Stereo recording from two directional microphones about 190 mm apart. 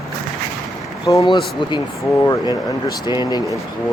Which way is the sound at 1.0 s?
20° left (ahead or behind).